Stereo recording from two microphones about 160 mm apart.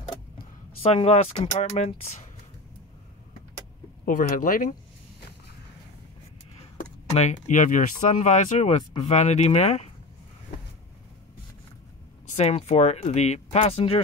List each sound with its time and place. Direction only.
0.8 s speech: 40° left (ahead or behind)
4.0 s speech: 60° left (ahead or behind)
6.8 s computer keyboard: 45° left (ahead or behind)
7.4 s speech: 50° left (ahead or behind)
12.4 s speech: 40° left (ahead or behind)